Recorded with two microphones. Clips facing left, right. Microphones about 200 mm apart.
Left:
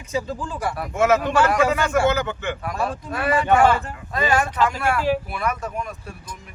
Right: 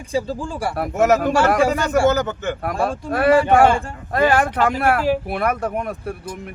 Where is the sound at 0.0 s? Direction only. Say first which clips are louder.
Right 3 dB; 30° right (ahead or behind).